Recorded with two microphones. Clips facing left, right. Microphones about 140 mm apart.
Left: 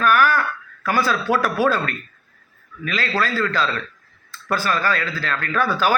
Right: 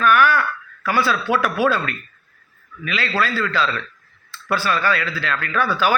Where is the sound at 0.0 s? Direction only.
40° left (ahead or behind).